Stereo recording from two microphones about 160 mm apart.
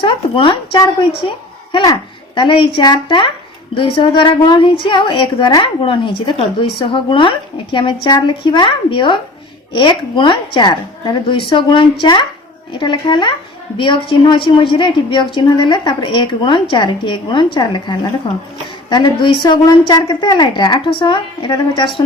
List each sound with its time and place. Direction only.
0.0 s a woman's voice: 35° left (ahead or behind)